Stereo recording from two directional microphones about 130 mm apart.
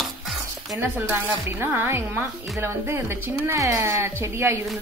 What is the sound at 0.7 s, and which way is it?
Speech, 20° right (ahead or behind).